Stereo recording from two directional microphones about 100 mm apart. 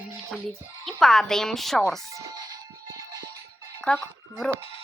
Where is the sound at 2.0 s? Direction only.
35° right (ahead or behind).